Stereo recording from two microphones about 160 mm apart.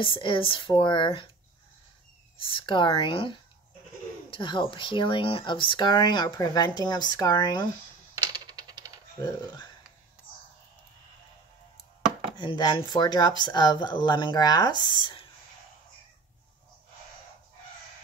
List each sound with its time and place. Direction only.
0.0 s speech: 30° left (ahead or behind)
2.4 s speech: 30° left (ahead or behind)
8.1 s typewriter: 25° right (ahead or behind)
9.2 s speech: 25° left (ahead or behind)
12.4 s speech: 30° left (ahead or behind)